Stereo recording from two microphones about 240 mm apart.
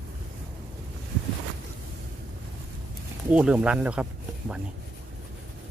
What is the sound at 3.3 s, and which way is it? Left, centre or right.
Speech, centre.